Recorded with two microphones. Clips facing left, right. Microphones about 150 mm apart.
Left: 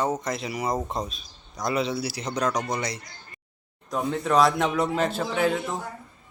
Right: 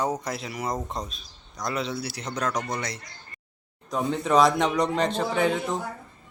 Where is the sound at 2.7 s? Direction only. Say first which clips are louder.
Left 2 dB; centre (ahead or behind).